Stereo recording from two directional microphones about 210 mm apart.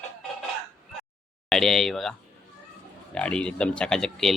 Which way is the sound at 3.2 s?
5° left (ahead or behind).